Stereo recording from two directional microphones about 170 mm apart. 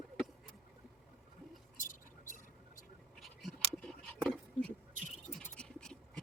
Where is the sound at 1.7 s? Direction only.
50° left (ahead or behind).